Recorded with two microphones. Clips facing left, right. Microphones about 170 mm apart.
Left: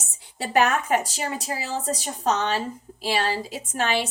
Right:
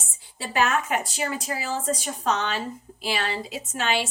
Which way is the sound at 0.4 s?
55° left (ahead or behind).